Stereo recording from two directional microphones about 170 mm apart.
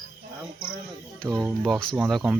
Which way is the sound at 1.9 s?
Centre (ahead or behind).